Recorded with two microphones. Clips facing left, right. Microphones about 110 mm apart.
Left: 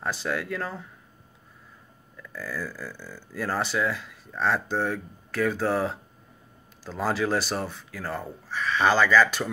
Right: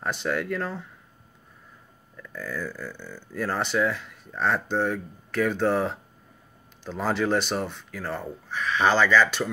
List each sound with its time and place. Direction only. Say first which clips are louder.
0.0 s speech: right 2 dB; centre (ahead or behind)
2.3 s speech: right 1 dB; 5° left (ahead or behind)